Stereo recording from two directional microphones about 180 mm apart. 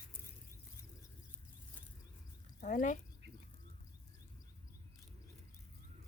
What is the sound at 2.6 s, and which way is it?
Speech, 45° left (ahead or behind).